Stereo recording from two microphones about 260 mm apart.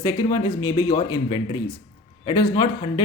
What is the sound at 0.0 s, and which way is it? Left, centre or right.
A man's voice, centre.